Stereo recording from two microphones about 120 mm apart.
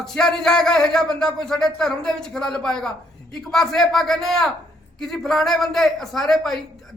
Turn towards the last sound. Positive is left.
turn(degrees=0)  # may be behind; listen again after turning